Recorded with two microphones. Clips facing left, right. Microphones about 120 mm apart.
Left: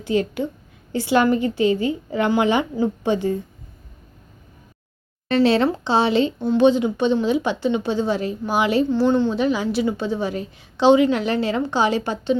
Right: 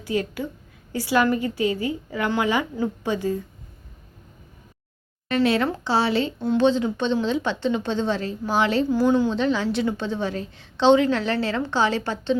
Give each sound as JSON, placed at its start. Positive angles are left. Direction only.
{"t": 0.0, "sound": "a woman's voice", "side_deg": 25}
{"t": 5.3, "sound": "a woman's voice", "side_deg": 30}
{"t": 9.0, "sound": "speech", "side_deg": -5}
{"t": 9.3, "sound": "a woman's voice", "side_deg": 10}